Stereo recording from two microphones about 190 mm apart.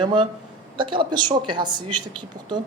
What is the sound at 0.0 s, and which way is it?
A man's voice, 25° right (ahead or behind).